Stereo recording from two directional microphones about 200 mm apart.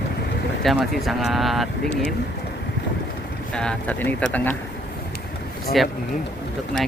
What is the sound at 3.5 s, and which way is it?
Speech, 5° left (ahead or behind).